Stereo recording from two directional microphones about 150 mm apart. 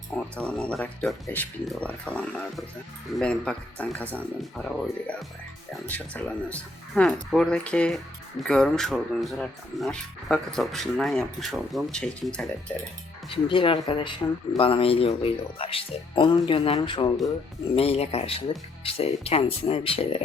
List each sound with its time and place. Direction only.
0.2 s speech: 5° left (ahead or behind)
13.3 s speech: 35° left (ahead or behind)